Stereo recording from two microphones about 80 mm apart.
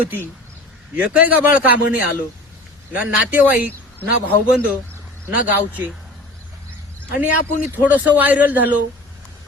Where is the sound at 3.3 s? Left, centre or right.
Right.